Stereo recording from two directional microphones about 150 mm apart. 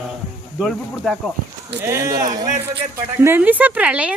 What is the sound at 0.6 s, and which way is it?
Speech, centre (ahead or behind).